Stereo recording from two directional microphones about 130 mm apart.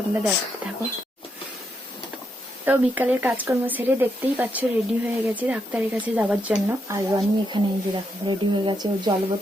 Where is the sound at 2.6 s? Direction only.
15° right (ahead or behind).